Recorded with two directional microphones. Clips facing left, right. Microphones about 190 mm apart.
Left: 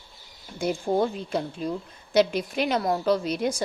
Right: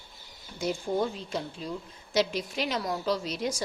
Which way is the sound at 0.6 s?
55° left (ahead or behind).